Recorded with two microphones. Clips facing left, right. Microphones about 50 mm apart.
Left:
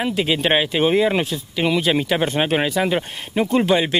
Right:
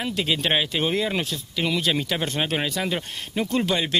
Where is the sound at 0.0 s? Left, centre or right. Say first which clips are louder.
Left 5 dB; centre.